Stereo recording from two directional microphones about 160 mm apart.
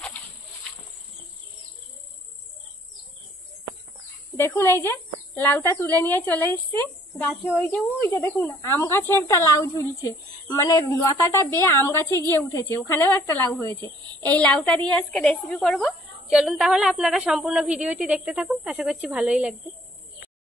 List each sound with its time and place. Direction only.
4.4 s a woman's voice: 15° left (ahead or behind); by 19.5 s 5° right (ahead or behind)